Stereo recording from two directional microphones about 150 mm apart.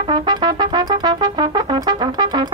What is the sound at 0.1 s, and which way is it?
Brass instrument, 30° right (ahead or behind).